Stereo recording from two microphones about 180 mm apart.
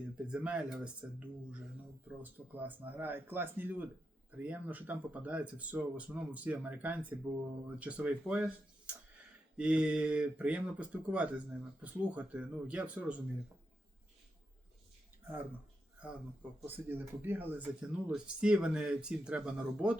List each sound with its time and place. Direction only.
0.3 s speech: 5° right (ahead or behind)
2.2 s speech: 10° right (ahead or behind)
16.0 s speech: 5° right (ahead or behind)